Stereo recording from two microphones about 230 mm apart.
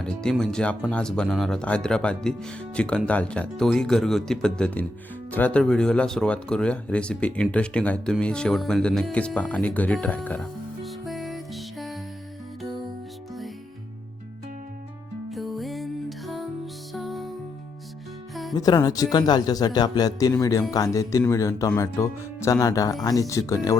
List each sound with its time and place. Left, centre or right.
0.0 s speech: centre
15.3 s music: centre
18.5 s a man's voice: centre